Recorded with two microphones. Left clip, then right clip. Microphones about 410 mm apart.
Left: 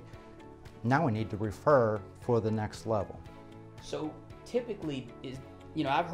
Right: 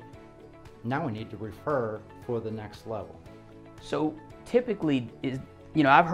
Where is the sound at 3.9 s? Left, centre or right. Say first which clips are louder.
Right 8 dB; right.